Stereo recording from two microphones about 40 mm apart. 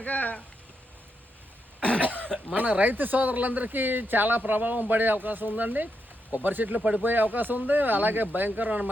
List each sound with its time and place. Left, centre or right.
0.0 s speech: left
1.8 s cough: left
2.0 s cough: right
2.6 s speech: right
6.7 s speech: right
7.0 s speech: right